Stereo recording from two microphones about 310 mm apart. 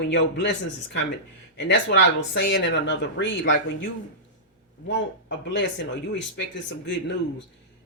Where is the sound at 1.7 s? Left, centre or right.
Left.